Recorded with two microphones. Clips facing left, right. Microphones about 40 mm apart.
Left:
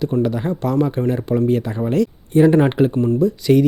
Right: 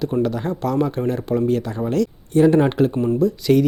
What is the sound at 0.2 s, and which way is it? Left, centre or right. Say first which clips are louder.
A man's voice: left 1 dB; centre.